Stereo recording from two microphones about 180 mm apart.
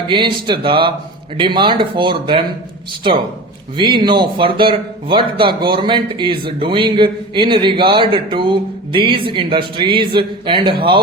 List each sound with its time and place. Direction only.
0.1 s speech: 25° right (ahead or behind)
3.8 s speech: 25° right (ahead or behind)